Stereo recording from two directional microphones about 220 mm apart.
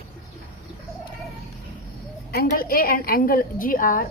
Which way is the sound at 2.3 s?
45° left (ahead or behind).